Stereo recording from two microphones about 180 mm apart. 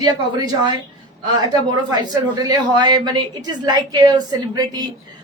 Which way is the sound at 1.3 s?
25° right (ahead or behind).